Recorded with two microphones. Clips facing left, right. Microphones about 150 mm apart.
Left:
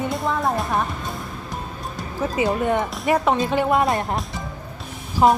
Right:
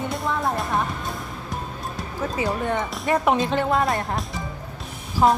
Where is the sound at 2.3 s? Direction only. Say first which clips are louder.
Left 4 dB; 15° left (ahead or behind).